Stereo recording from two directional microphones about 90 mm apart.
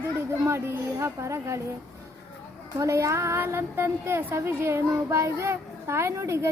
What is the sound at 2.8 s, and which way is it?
A woman's voice, 35° right (ahead or behind).